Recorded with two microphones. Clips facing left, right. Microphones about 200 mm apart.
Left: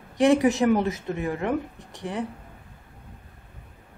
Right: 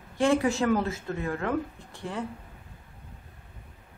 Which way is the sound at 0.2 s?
20° left (ahead or behind).